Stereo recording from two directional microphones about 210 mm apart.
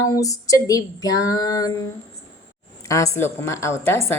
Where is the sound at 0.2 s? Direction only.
15° left (ahead or behind).